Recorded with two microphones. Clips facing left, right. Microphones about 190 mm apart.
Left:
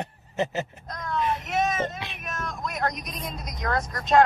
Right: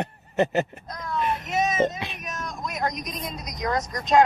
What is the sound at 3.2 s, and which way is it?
Speech, 5° left (ahead or behind).